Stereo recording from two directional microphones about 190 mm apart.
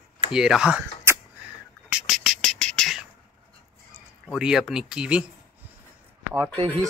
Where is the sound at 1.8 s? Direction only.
5° right (ahead or behind).